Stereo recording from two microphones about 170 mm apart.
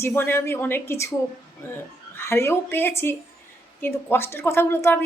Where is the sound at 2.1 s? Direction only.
15° left (ahead or behind).